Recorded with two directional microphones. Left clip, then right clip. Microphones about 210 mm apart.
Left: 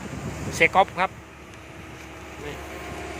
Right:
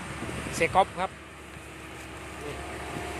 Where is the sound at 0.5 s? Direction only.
10° left (ahead or behind).